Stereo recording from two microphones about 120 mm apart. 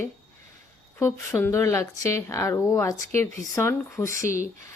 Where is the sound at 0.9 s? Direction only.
20° left (ahead or behind).